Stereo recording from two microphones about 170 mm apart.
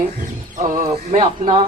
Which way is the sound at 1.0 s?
40° right (ahead or behind).